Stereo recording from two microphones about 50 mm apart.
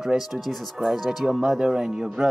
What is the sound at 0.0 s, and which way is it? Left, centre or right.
Speech, centre.